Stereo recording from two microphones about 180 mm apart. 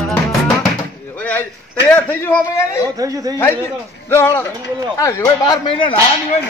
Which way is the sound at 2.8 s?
20° right (ahead or behind).